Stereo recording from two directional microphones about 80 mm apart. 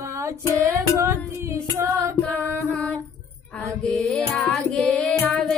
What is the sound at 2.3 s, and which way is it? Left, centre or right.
Music, centre.